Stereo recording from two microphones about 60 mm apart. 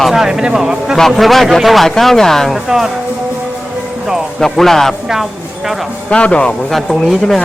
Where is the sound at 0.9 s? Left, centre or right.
Centre.